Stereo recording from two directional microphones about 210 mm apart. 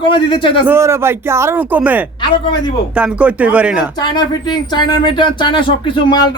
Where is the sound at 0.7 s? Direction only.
10° right (ahead or behind).